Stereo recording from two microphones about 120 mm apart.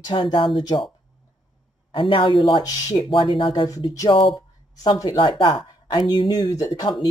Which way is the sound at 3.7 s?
30° left (ahead or behind).